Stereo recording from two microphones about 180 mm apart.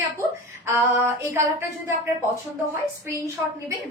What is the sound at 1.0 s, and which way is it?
Speech, 15° right (ahead or behind).